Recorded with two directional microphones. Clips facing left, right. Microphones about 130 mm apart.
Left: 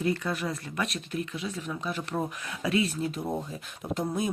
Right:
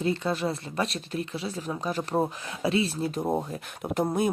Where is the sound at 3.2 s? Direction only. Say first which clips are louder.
Right 5 dB; 50° right (ahead or behind).